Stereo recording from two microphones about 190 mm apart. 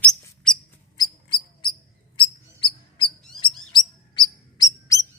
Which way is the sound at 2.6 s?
25° left (ahead or behind).